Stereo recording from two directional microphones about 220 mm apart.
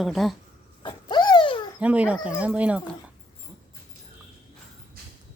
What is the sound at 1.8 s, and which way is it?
Speech, 5° right (ahead or behind).